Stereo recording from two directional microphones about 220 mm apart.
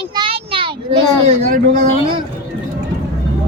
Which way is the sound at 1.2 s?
30° right (ahead or behind).